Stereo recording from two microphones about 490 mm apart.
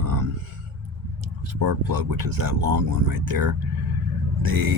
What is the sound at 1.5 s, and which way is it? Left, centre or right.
Speech, right.